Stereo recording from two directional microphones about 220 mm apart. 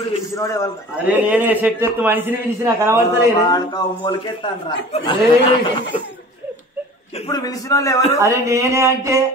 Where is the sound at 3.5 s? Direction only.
20° left (ahead or behind).